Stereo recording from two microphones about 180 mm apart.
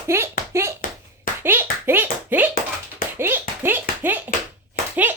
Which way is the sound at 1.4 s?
10° right (ahead or behind).